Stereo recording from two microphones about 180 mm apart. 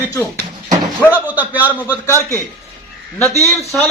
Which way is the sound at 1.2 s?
10° right (ahead or behind).